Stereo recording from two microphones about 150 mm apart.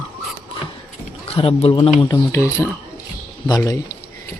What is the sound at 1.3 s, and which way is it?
Speech, 40° left (ahead or behind).